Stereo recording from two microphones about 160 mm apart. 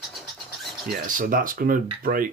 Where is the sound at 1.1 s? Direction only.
60° right (ahead or behind).